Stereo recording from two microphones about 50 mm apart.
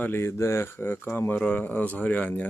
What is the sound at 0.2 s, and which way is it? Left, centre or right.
Speech, left.